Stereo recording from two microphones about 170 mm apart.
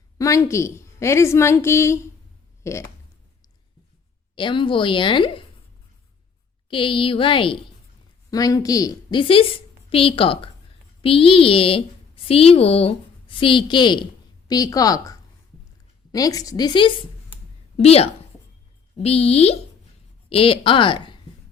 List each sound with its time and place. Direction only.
0.2 s a woman's voice: 15° left (ahead or behind)
4.4 s a woman's voice: 30° left (ahead or behind)
6.7 s a woman's voice: 30° left (ahead or behind)
17.7 s a woman's voice: 35° left (ahead or behind)